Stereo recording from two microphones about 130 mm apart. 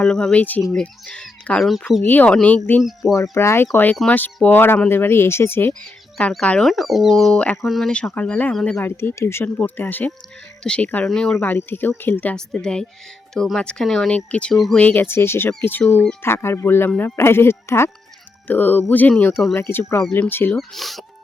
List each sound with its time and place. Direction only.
0.0 s speech: 5° left (ahead or behind)
2.0 s speech: 10° left (ahead or behind)
2.8 s speech: centre (ahead or behind)
3.3 s speech: 20° left (ahead or behind)
9.0 s speech: 20° left (ahead or behind)
11.3 s speech: 15° left (ahead or behind)
14.8 s speech: 15° left (ahead or behind)
20.6 s speech: centre (ahead or behind)